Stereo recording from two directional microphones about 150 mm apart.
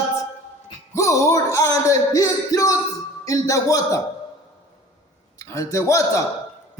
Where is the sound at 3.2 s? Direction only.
20° left (ahead or behind).